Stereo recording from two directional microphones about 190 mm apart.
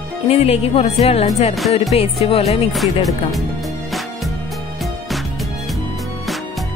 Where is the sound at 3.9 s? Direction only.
Centre (ahead or behind).